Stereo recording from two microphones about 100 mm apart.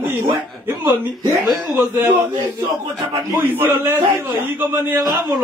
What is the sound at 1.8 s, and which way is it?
Speech, 20° right (ahead or behind).